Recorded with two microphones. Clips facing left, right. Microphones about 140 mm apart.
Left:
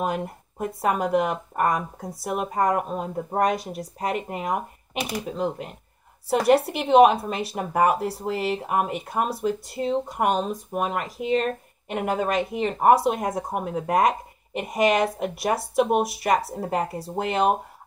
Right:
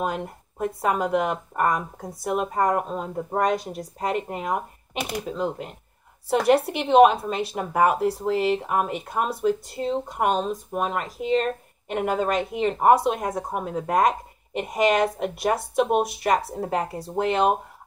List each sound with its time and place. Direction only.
0.0 s speech: 5° left (ahead or behind)